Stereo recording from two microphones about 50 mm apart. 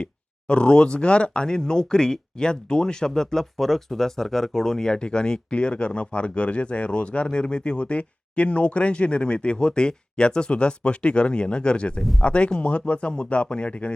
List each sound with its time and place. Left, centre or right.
0.0 s speech: left